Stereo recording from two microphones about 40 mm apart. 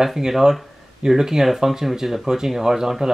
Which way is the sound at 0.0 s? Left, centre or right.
Centre.